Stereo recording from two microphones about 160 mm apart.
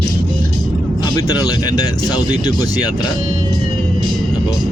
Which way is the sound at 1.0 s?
25° left (ahead or behind).